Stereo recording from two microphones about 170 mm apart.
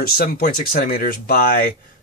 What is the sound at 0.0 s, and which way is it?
Speech, 60° left (ahead or behind).